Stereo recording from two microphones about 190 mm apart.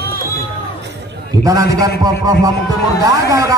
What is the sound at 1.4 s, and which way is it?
Speech, 20° right (ahead or behind).